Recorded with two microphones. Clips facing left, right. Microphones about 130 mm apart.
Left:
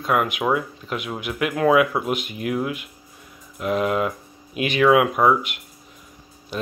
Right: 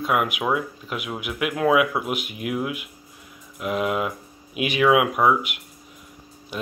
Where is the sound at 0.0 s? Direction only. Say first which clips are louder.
Left 2 dB; 5° right (ahead or behind).